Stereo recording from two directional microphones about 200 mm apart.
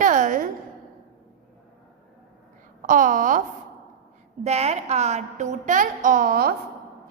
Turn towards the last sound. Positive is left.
turn(degrees=-45)  # may be behind; listen again after turning